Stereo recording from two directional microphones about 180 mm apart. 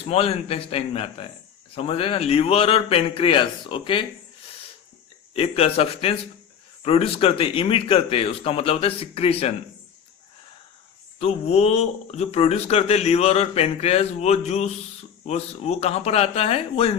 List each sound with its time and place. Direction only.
0.0 s speech: 35° left (ahead or behind)
5.3 s speech: 35° left (ahead or behind)
11.2 s speech: 35° left (ahead or behind)